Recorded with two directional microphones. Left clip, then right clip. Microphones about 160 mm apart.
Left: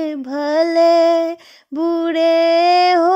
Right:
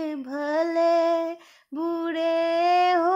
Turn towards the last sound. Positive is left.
turn(degrees=45)  # may be behind; listen again after turning